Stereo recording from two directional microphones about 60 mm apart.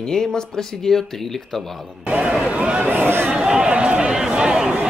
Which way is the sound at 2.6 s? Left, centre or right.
Centre.